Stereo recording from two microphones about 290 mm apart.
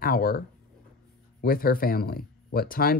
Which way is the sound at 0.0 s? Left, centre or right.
Left.